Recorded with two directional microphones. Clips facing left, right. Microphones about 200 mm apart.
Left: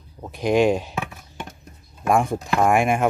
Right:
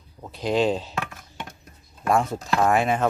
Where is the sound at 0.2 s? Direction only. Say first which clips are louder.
Left 4 dB; 15° left (ahead or behind).